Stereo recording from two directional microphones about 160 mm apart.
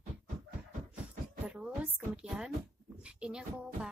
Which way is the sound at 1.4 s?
5° right (ahead or behind).